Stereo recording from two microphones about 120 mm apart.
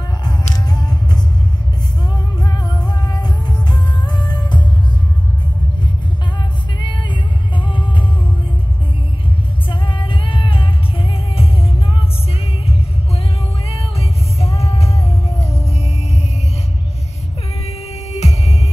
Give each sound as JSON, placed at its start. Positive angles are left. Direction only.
{"t": 0.7, "sound": "music", "side_deg": 35}
{"t": 2.4, "sound": "music", "side_deg": 35}
{"t": 6.8, "sound": "music", "side_deg": 40}
{"t": 9.7, "sound": "music", "side_deg": 45}
{"t": 13.7, "sound": "music", "side_deg": 55}
{"t": 18.2, "sound": "music", "side_deg": 65}